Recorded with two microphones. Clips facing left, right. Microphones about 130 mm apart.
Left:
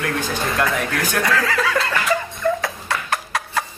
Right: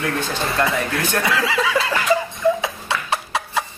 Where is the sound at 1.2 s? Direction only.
10° right (ahead or behind).